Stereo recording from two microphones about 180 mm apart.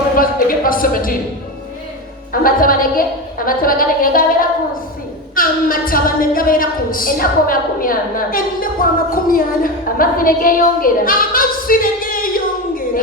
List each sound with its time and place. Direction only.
0.2 s a woman's voice: 50° left (ahead or behind)
2.3 s a woman's voice: 50° left (ahead or behind)